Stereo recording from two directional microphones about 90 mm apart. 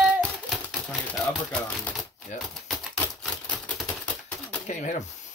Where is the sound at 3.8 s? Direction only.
15° left (ahead or behind).